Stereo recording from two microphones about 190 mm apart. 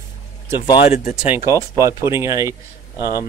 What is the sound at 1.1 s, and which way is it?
Speech, 10° right (ahead or behind).